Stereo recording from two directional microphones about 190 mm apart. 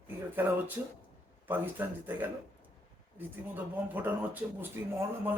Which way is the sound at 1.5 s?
10° right (ahead or behind).